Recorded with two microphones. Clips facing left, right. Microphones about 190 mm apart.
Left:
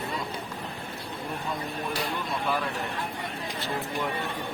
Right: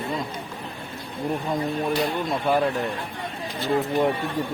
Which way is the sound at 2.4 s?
45° right (ahead or behind).